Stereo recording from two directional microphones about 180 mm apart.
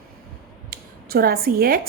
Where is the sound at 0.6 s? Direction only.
55° right (ahead or behind).